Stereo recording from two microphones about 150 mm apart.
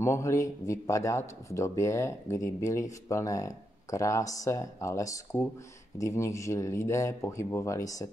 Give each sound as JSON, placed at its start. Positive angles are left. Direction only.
{"t": 0.0, "sound": "speech", "side_deg": 20}